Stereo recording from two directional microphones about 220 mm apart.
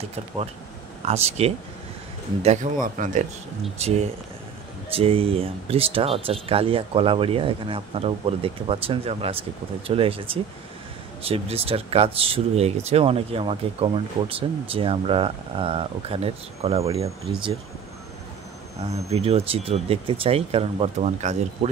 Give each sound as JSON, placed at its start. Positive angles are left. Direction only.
{"t": 1.0, "sound": "speech", "side_deg": -30}
{"t": 18.8, "sound": "speech", "side_deg": -30}